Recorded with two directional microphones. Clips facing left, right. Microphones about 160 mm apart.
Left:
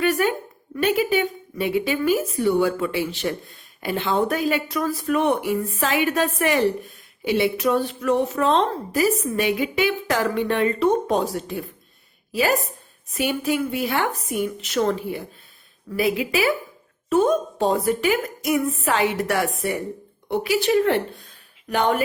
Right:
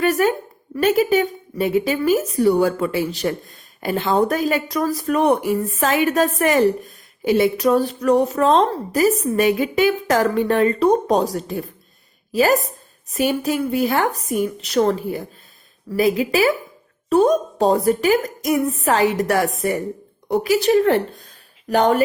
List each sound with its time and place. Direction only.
0.0 s a woman's voice: 40° right (ahead or behind)